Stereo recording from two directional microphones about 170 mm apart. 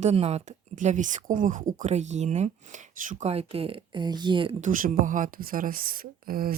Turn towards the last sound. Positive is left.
turn(degrees=-60)  # may be behind; listen again after turning